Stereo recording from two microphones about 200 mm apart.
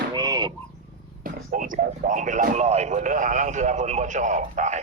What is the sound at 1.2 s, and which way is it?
A man's voice, 45° right (ahead or behind).